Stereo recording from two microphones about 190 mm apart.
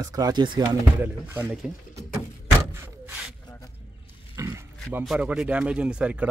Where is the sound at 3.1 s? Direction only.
5° right (ahead or behind).